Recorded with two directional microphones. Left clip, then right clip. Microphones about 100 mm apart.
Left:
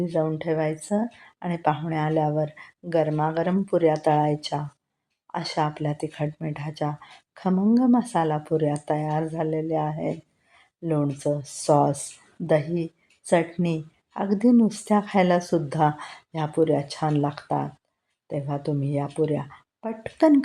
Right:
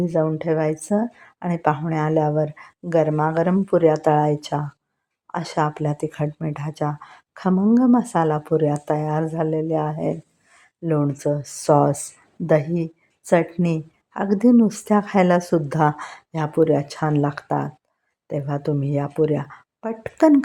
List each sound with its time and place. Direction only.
0.0 s speech: 55° right (ahead or behind)